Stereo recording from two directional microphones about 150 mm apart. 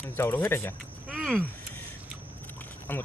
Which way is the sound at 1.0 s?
Centre (ahead or behind).